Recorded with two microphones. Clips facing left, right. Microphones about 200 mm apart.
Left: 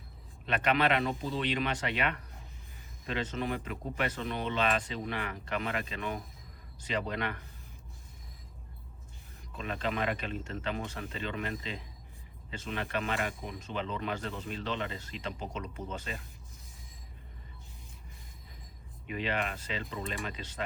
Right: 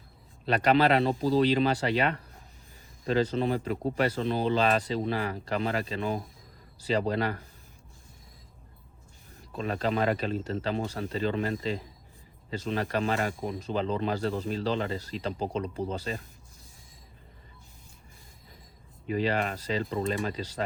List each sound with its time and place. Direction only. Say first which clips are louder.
0.4 s speech: right 6 dB; 35° right (ahead or behind)
9.5 s speech: right 6 dB; 35° right (ahead or behind)
19.0 s speech: right 6 dB; 35° right (ahead or behind)